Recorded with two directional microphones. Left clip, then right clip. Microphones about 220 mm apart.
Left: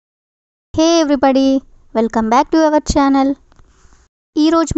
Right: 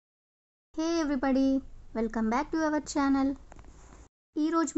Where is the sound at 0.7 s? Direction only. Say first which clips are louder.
Left 17 dB; 40° left (ahead or behind).